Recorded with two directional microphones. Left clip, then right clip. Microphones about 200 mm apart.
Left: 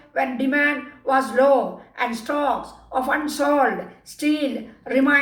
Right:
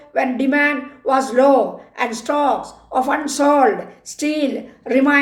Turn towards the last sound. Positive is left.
turn(degrees=-45)  # may be behind; listen again after turning